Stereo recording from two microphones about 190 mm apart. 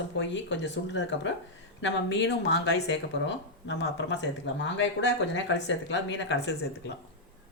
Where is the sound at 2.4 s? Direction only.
65° left (ahead or behind).